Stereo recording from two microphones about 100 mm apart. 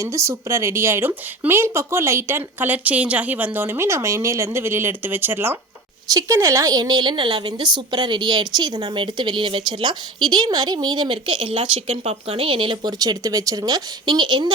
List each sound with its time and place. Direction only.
0.0 s a woman's voice: 30° right (ahead or behind); by 12.8 s 60° right (ahead or behind)
12.8 s a woman's voice: 40° right (ahead or behind)